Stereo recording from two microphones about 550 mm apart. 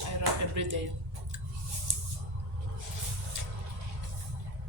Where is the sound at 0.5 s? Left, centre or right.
Right.